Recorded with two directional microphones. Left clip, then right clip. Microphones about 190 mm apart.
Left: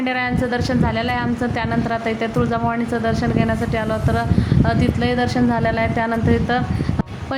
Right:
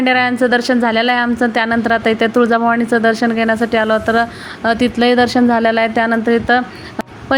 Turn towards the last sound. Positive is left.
turn(degrees=-25)  # may be behind; listen again after turning